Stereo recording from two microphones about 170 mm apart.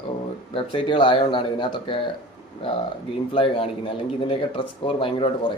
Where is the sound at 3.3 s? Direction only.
30° left (ahead or behind).